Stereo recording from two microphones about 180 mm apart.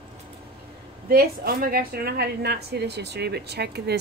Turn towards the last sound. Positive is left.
turn(degrees=-65)  # may be behind; listen again after turning